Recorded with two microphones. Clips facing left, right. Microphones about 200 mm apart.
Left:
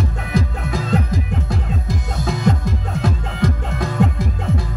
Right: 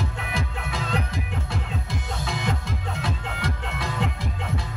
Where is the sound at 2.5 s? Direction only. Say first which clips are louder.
Left 9 dB; 45° left (ahead or behind).